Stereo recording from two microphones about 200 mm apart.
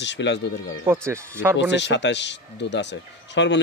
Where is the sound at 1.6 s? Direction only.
60° left (ahead or behind).